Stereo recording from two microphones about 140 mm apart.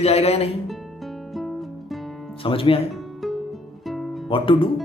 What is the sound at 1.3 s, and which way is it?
Music, centre (ahead or behind).